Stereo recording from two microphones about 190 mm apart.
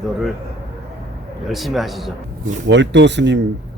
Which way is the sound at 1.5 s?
Centre (ahead or behind).